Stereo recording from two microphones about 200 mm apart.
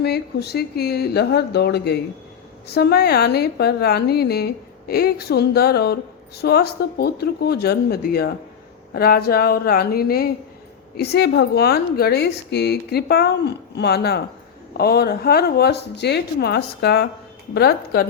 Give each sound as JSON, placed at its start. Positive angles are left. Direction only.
{"t": 0.0, "sound": "a woman's voice", "side_deg": 55}